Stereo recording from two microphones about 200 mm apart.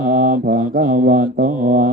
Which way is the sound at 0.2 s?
45° right (ahead or behind).